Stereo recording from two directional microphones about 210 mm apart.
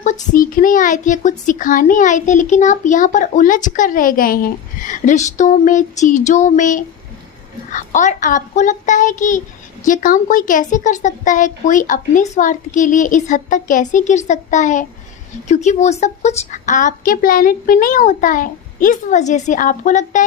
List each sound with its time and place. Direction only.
0.0 s speech: 40° left (ahead or behind)